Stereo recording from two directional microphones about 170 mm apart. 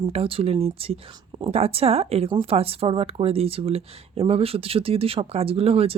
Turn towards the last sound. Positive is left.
turn(degrees=-35)  # may be behind; listen again after turning